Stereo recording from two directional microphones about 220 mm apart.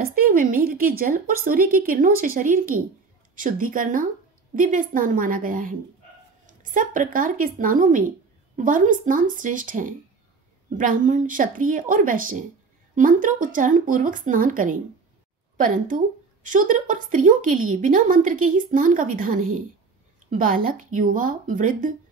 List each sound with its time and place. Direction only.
0.0 s a woman's voice: 40° right (ahead or behind)